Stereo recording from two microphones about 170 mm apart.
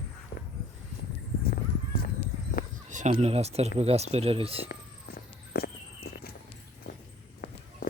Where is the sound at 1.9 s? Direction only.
65° left (ahead or behind).